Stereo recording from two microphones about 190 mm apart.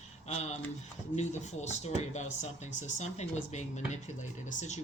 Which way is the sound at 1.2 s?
35° left (ahead or behind).